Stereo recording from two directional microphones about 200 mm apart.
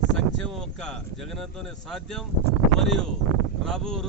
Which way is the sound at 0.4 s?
5° left (ahead or behind).